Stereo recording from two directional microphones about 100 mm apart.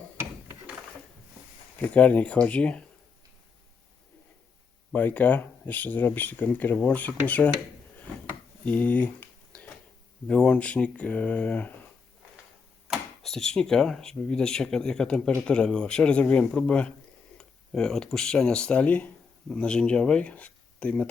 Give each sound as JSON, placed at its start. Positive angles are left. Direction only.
{"t": 1.8, "sound": "speech", "side_deg": 15}
{"t": 4.9, "sound": "speech", "side_deg": 15}
{"t": 8.6, "sound": "a sound", "side_deg": 15}
{"t": 10.2, "sound": "speech", "side_deg": 10}
{"t": 12.9, "sound": "speech", "side_deg": 5}